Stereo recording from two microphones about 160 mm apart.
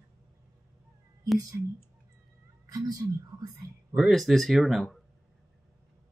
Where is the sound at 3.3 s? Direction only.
20° right (ahead or behind).